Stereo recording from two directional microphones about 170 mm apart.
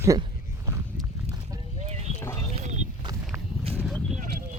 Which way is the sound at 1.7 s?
40° right (ahead or behind).